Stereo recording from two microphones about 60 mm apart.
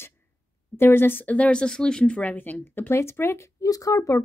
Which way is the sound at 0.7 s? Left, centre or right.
Left.